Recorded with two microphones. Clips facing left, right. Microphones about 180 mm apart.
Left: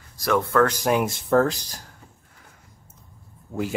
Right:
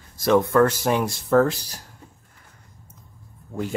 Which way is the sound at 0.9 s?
Centre (ahead or behind).